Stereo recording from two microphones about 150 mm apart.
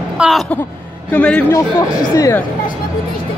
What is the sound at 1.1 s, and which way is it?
Speech, 10° left (ahead or behind).